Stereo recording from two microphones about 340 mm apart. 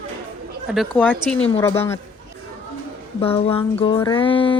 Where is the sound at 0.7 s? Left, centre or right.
Centre.